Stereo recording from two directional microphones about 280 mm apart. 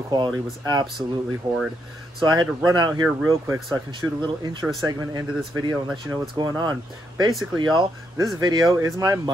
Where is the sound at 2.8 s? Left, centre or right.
Centre.